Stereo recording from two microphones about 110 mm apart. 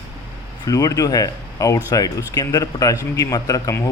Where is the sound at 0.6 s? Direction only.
35° left (ahead or behind).